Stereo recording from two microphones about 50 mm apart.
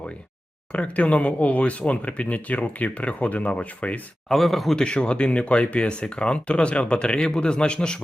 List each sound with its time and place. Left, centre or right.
0.7 s speech: left
4.3 s a man's voice: centre
4.8 s a man's voice: centre